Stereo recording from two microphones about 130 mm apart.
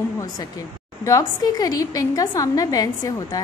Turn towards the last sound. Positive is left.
turn(degrees=30)  # may be behind; listen again after turning